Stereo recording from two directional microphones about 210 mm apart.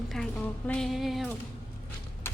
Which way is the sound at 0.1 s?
5° left (ahead or behind).